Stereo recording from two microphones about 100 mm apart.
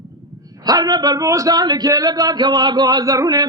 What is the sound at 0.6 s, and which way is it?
A man's voice, 40° right (ahead or behind).